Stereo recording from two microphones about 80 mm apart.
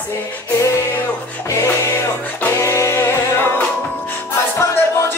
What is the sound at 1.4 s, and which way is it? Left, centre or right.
Choir, left.